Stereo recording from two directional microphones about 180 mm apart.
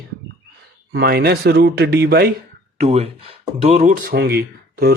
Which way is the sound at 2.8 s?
35° right (ahead or behind).